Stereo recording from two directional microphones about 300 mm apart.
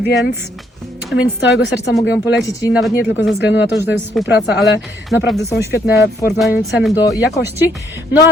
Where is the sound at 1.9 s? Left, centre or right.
Centre.